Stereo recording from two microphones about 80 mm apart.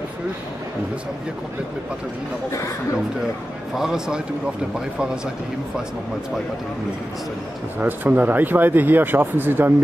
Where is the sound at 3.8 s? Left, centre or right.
Centre.